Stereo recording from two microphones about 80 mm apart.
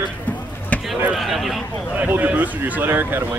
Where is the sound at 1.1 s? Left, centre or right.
Centre.